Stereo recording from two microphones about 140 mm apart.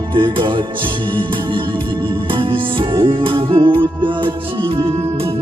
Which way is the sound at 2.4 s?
35° right (ahead or behind).